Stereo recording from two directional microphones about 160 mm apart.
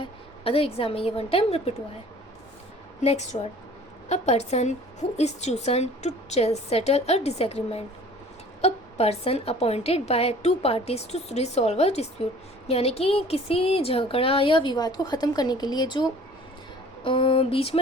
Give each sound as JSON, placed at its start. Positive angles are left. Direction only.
{"t": 0.0, "sound": "a woman's voice", "side_deg": 35}
{"t": 3.0, "sound": "a woman's voice", "side_deg": 45}